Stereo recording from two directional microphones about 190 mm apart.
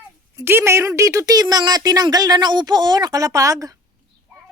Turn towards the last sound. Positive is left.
turn(degrees=-15)  # may be behind; listen again after turning